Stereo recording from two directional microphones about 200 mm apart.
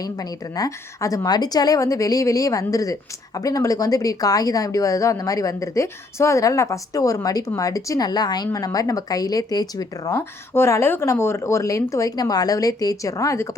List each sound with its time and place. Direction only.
0.0 s a woman's voice: 20° left (ahead or behind)